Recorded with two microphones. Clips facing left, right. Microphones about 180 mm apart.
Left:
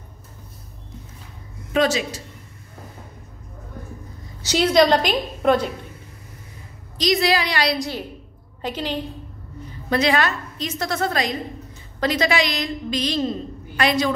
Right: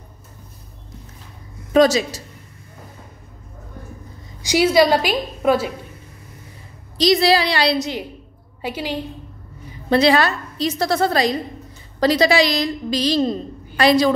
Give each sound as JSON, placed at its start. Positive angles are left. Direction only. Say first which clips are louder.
{"t": 1.7, "sound": "a woman's voice", "louder": "right 6 dB", "side_deg": -40}
{"t": 4.4, "sound": "a woman's voice", "louder": "right 2 dB", "side_deg": -10}
{"t": 7.0, "sound": "a woman's voice", "louder": "right 4 dB", "side_deg": -30}
{"t": 8.6, "sound": "a woman's voice", "louder": "right 1 dB", "side_deg": -10}
{"t": 9.8, "sound": "a woman's voice", "louder": "right 4 dB", "side_deg": -30}